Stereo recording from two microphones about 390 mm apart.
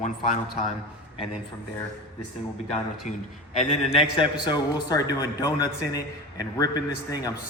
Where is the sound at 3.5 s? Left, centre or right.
Centre.